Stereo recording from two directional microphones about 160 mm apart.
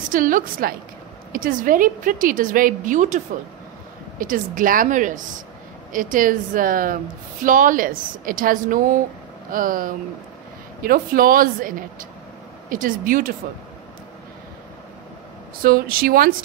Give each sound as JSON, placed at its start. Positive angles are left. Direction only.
{"t": 0.1, "sound": "a woman's voice", "side_deg": -60}
{"t": 4.2, "sound": "a woman's voice", "side_deg": -60}
{"t": 15.6, "sound": "a woman's voice", "side_deg": -65}